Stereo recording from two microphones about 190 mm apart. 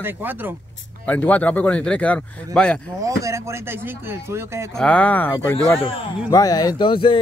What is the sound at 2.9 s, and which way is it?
Speech, 15° right (ahead or behind).